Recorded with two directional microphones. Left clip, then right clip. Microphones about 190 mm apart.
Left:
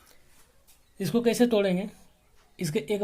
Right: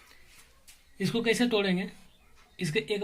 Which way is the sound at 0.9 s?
65° left (ahead or behind).